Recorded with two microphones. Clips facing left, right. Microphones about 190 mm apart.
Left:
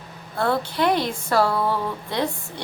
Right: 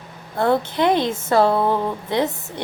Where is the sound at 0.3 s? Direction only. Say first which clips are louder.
Right 4 dB; 20° right (ahead or behind).